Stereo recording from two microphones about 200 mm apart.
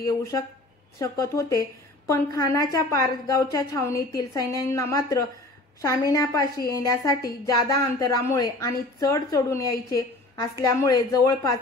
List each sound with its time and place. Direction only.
0.0 s a woman's voice: 15° left (ahead or behind)